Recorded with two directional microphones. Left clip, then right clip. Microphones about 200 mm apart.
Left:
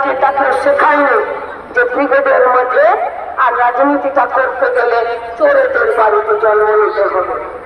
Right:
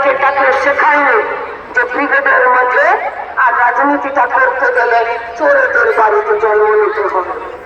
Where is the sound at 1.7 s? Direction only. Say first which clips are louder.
Left 1 dB; 30° left (ahead or behind).